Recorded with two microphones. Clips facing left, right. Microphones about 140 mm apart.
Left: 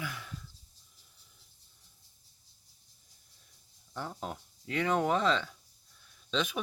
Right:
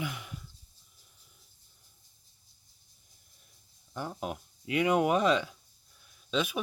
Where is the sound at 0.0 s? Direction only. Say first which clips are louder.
Right 3 dB; 15° right (ahead or behind).